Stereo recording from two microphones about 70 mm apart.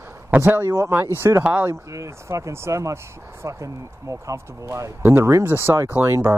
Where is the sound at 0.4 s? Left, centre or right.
Right.